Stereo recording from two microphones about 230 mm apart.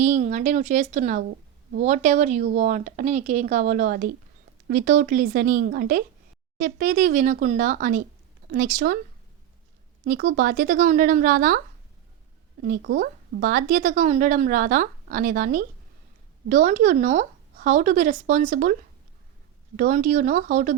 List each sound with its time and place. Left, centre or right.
0.0 s speech: right
10.0 s speech: right
12.6 s speech: right